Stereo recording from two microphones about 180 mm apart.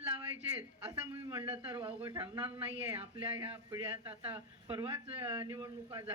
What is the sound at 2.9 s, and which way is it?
Speech, 30° right (ahead or behind).